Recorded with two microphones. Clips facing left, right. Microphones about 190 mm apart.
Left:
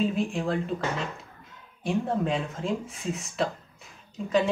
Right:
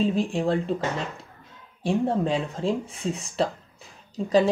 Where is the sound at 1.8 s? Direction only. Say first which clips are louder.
Right 3 dB; 30° right (ahead or behind).